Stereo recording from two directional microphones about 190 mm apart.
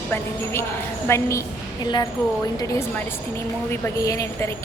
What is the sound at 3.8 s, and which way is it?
Speech, 15° left (ahead or behind).